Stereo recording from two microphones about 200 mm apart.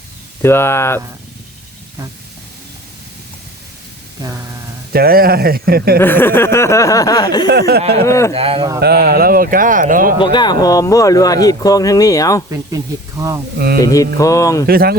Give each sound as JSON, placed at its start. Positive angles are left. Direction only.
{"t": 0.4, "sound": "speech", "side_deg": 10}
{"t": 4.2, "sound": "speech", "side_deg": -20}
{"t": 4.9, "sound": "speech", "side_deg": -50}
{"t": 6.0, "sound": "speech", "side_deg": 10}
{"t": 7.8, "sound": "speech", "side_deg": -30}
{"t": 8.0, "sound": "speech", "side_deg": 15}
{"t": 8.3, "sound": "speech", "side_deg": -30}
{"t": 8.8, "sound": "speech", "side_deg": -50}
{"t": 10.2, "sound": "speech", "side_deg": 20}
{"t": 12.5, "sound": "speech", "side_deg": -15}
{"t": 13.7, "sound": "speech", "side_deg": 15}
{"t": 14.7, "sound": "speech", "side_deg": -50}